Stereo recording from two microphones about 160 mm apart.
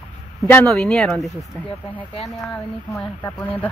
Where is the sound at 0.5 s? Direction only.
5° left (ahead or behind).